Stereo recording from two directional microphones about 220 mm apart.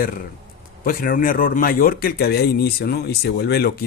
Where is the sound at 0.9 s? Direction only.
40° left (ahead or behind).